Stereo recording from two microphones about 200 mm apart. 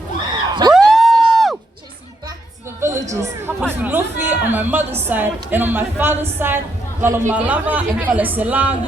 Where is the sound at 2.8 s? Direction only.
15° right (ahead or behind).